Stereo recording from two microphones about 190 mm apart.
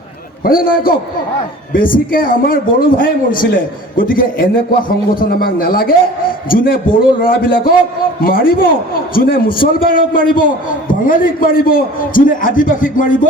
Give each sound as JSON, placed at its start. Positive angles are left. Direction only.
{"t": 0.4, "sound": "a man's voice", "side_deg": 50}